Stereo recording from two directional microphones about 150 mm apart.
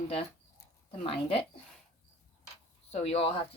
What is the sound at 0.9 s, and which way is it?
Speech, 35° left (ahead or behind).